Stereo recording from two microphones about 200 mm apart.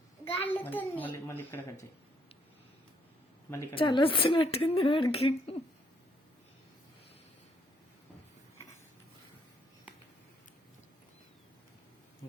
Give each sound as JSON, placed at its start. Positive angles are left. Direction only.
{"t": 0.3, "sound": "a child's voice", "side_deg": 10}
{"t": 3.5, "sound": "a child's voice", "side_deg": 15}